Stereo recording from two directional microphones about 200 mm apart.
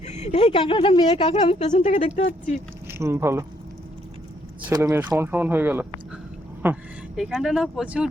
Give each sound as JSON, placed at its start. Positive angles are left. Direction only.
{"t": 0.0, "sound": "speech", "side_deg": 35}
{"t": 2.8, "sound": "speech", "side_deg": -15}
{"t": 4.7, "sound": "speech", "side_deg": -15}